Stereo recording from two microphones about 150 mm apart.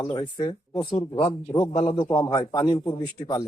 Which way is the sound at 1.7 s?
45° left (ahead or behind).